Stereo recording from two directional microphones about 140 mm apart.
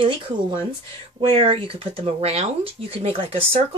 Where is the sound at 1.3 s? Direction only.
40° right (ahead or behind).